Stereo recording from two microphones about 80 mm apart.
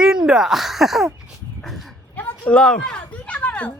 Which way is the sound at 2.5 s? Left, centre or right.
Centre.